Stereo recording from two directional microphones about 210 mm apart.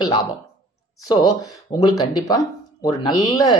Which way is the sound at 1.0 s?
20° left (ahead or behind).